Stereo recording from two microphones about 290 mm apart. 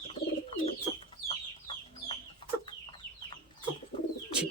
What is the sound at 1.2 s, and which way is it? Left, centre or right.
Chicken, centre.